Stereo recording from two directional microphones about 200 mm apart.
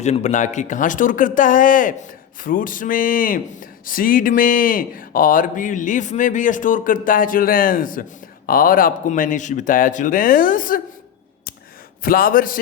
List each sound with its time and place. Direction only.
0.0 s a man's voice: 35° left (ahead or behind)
12.0 s a man's voice: 45° left (ahead or behind)